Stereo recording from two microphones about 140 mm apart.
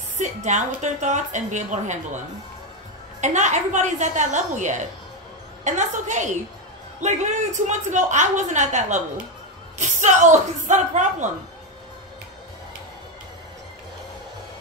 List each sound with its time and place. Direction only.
0.2 s a woman's voice: 60° right (ahead or behind)
3.2 s a woman's voice: 60° right (ahead or behind)